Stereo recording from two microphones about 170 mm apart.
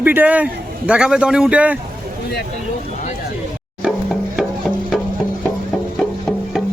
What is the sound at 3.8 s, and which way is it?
Music, 5° right (ahead or behind).